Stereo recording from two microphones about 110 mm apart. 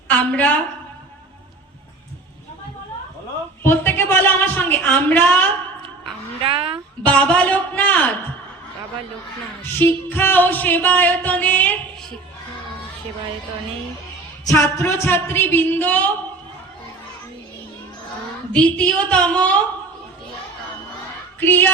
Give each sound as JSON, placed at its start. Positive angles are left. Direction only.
{"t": 0.1, "sound": "a woman's voice", "side_deg": 15}
{"t": 3.6, "sound": "music", "side_deg": 20}
{"t": 6.4, "sound": "speech", "side_deg": -60}
{"t": 7.0, "sound": "music", "side_deg": 10}
{"t": 9.7, "sound": "music", "side_deg": 20}
{"t": 14.4, "sound": "a woman's voice", "side_deg": 25}
{"t": 18.5, "sound": "music", "side_deg": 10}
{"t": 21.4, "sound": "a woman's voice", "side_deg": 20}